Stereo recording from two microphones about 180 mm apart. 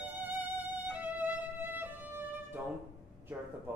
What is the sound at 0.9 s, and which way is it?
Violin, 10° right (ahead or behind).